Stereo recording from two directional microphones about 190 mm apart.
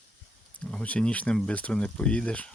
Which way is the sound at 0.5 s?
5° left (ahead or behind).